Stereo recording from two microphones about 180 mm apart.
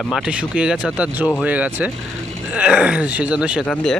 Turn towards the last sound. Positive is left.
turn(degrees=-5)  # may be behind; listen again after turning